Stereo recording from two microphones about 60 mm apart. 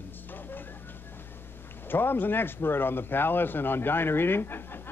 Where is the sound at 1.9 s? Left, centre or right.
Left.